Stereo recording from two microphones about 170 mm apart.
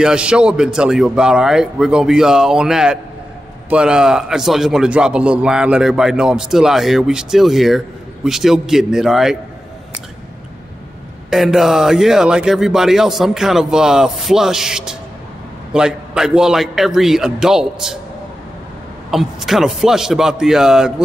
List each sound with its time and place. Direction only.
0.0 s a man's voice: 5° right (ahead or behind)
11.2 s a man's voice: centre (ahead or behind)
19.0 s a man's voice: centre (ahead or behind)